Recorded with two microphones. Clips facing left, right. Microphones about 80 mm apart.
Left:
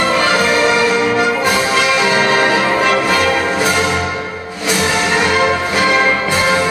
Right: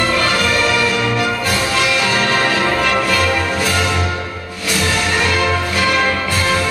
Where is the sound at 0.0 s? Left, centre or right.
Left.